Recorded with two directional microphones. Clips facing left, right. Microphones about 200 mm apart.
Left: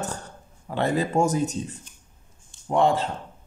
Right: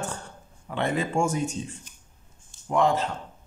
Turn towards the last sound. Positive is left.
turn(degrees=30)  # may be behind; listen again after turning